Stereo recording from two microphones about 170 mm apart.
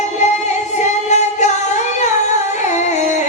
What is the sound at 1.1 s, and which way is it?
Singing, 45° left (ahead or behind).